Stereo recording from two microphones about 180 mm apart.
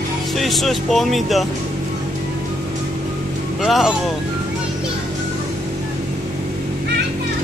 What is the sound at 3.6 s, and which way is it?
Speech, centre (ahead or behind).